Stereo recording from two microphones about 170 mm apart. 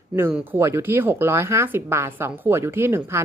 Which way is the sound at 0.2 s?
10° right (ahead or behind).